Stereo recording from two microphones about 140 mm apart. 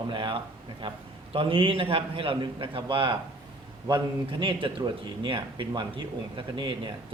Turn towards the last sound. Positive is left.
turn(degrees=-35)  # may be behind; listen again after turning